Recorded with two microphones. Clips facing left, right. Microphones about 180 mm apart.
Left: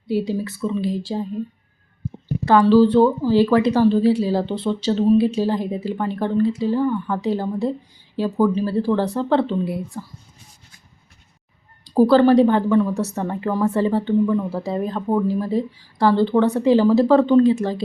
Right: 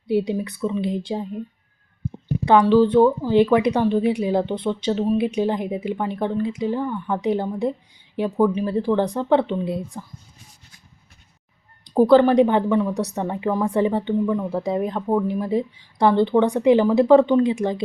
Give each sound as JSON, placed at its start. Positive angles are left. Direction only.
{"t": 0.1, "sound": "speech", "side_deg": -20}
{"t": 2.4, "sound": "a woman's voice", "side_deg": -15}
{"t": 11.9, "sound": "speech", "side_deg": -20}